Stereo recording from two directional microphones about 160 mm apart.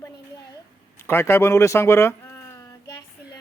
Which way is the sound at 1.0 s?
15° left (ahead or behind).